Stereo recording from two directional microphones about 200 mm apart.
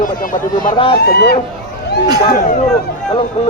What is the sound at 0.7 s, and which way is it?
Speech, 25° left (ahead or behind).